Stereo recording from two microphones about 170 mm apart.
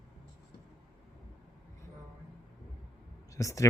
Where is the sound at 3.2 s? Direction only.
20° left (ahead or behind).